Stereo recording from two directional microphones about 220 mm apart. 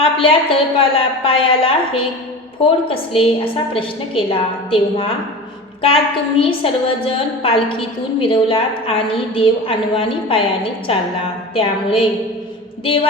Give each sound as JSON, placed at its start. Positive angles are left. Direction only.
{"t": 0.0, "sound": "a woman's voice", "side_deg": 25}
{"t": 6.4, "sound": "a woman's voice", "side_deg": 25}